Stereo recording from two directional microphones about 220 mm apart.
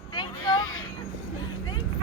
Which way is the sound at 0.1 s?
20° left (ahead or behind).